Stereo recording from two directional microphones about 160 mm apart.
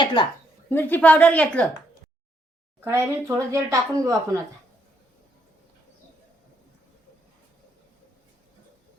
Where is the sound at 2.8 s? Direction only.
20° right (ahead or behind).